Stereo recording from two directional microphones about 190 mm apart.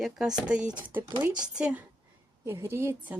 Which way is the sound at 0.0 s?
5° right (ahead or behind).